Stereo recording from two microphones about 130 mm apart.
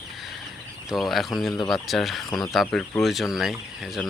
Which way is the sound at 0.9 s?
Centre (ahead or behind).